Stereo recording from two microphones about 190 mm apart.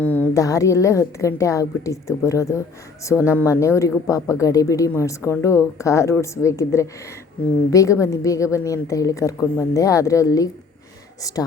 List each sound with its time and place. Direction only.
0.0 s a woman's voice: 10° left (ahead or behind)